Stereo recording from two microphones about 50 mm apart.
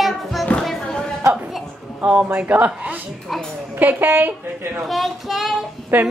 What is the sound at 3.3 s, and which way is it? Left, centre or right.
Music, centre.